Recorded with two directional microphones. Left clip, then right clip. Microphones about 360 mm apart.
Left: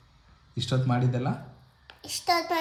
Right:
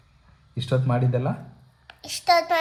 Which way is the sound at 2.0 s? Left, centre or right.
Centre.